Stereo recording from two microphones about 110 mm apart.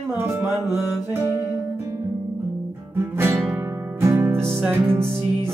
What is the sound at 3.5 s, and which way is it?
Music, 25° right (ahead or behind).